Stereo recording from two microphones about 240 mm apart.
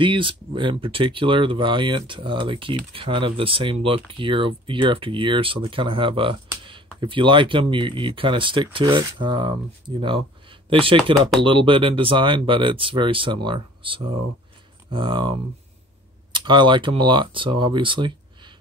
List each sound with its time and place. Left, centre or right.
0.0 s speech: right
16.3 s speech: centre